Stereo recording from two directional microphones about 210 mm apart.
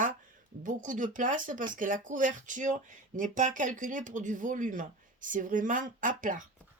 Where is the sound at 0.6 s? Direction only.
40° right (ahead or behind).